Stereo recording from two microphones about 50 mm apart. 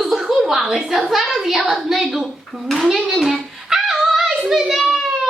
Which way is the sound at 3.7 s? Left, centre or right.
Centre.